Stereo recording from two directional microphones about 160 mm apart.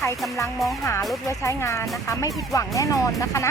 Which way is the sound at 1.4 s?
15° left (ahead or behind).